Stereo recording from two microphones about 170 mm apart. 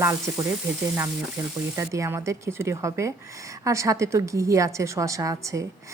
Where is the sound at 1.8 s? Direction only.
15° right (ahead or behind).